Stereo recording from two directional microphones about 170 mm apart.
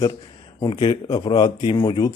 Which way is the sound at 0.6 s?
30° left (ahead or behind).